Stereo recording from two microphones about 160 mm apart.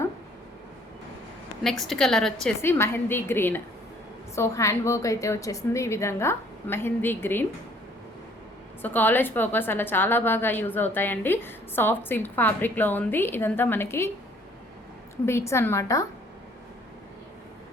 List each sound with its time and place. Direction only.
1.8 s a woman's voice: 5° left (ahead or behind)
2.6 s a woman's voice: 15° left (ahead or behind)
8.8 s a woman's voice: 10° left (ahead or behind)
15.3 s a woman's voice: 15° left (ahead or behind)